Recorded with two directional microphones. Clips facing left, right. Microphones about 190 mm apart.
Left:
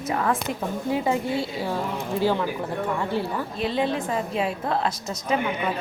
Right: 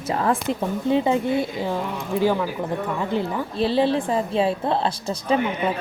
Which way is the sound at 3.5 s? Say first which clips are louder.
Right 6 dB; 30° right (ahead or behind).